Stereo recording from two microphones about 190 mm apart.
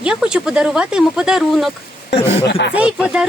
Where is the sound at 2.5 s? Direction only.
65° left (ahead or behind).